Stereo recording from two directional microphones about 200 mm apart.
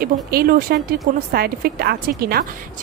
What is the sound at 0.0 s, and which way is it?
Speech, 50° right (ahead or behind).